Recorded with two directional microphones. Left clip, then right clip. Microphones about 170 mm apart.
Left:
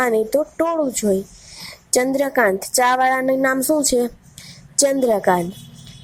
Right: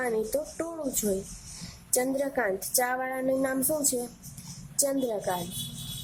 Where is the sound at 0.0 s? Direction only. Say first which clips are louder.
Left 11 dB; 30° left (ahead or behind).